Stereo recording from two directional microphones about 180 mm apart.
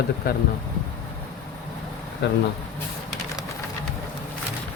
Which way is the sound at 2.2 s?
70° left (ahead or behind).